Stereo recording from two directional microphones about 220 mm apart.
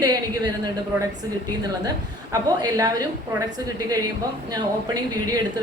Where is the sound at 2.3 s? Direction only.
15° right (ahead or behind).